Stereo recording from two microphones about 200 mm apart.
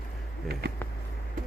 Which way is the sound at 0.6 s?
55° right (ahead or behind).